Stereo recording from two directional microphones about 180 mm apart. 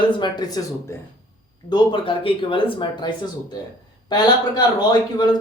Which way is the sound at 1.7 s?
30° left (ahead or behind).